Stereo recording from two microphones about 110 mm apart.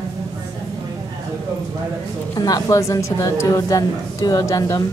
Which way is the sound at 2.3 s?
35° left (ahead or behind).